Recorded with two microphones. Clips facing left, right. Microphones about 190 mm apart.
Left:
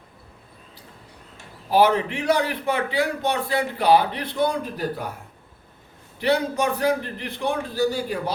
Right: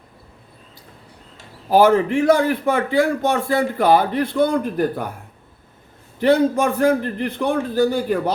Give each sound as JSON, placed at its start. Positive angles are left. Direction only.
{"t": 1.7, "sound": "speech", "side_deg": -50}
{"t": 6.1, "sound": "speech", "side_deg": -50}